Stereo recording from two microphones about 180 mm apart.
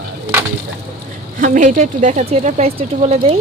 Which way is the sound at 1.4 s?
45° right (ahead or behind).